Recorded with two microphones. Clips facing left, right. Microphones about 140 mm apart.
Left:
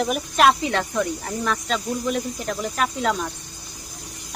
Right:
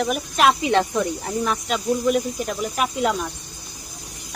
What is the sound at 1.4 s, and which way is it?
Speech, 15° right (ahead or behind).